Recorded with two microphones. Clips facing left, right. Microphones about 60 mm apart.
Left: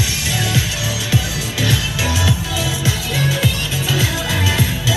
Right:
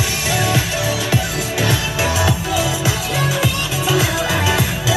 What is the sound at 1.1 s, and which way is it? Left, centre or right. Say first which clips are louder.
Music: right 2 dB; right.